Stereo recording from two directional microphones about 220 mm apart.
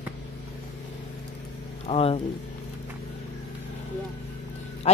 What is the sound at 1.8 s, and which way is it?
Speech, 25° left (ahead or behind).